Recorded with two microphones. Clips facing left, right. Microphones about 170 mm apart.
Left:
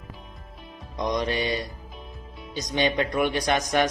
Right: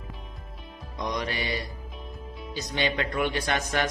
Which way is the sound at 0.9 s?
20° left (ahead or behind).